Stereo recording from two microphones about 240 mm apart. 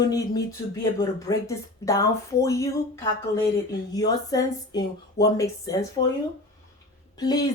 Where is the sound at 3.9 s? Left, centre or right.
Centre.